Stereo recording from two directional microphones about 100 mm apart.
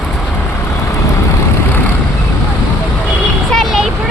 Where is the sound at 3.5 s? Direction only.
Centre (ahead or behind).